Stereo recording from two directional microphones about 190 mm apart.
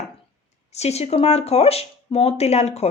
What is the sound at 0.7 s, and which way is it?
A woman's voice, 35° left (ahead or behind).